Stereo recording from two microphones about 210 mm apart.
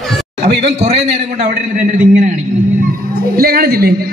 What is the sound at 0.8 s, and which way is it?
A man's voice, 30° right (ahead or behind).